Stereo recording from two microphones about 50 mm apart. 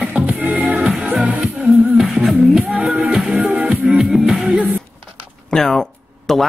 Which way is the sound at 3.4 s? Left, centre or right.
Right.